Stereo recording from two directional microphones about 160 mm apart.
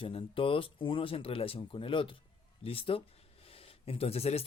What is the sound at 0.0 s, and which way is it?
Speech, 35° left (ahead or behind).